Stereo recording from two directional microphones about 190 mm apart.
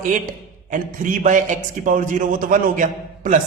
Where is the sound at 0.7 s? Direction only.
45° right (ahead or behind).